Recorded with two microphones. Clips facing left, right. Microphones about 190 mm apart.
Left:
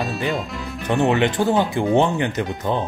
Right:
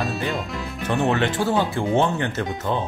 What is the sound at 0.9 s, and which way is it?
Speech, 20° left (ahead or behind).